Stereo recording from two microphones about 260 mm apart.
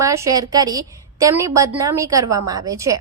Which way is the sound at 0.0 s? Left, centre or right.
Centre.